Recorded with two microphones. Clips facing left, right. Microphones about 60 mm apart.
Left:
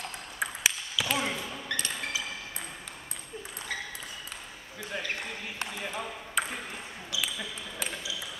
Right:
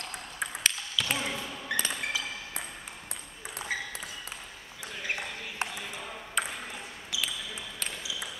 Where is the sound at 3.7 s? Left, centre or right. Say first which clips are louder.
Right 2 dB; centre.